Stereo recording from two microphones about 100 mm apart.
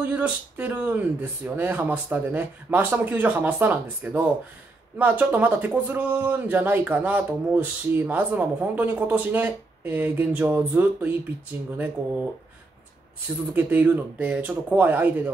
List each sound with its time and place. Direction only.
0.0 s speech: 15° right (ahead or behind)
13.5 s speech: 20° right (ahead or behind)